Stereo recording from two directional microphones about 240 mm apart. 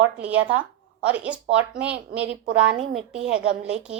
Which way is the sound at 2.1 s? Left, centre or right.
Right.